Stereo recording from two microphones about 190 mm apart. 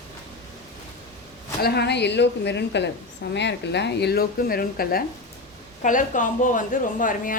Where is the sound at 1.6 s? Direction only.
60° left (ahead or behind).